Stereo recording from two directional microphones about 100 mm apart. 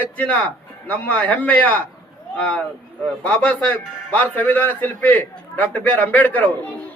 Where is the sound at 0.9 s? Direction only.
15° left (ahead or behind).